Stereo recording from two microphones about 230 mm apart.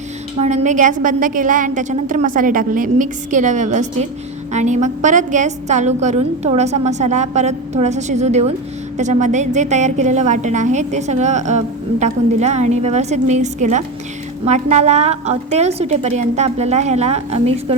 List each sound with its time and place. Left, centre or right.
0.3 s a woman's voice: right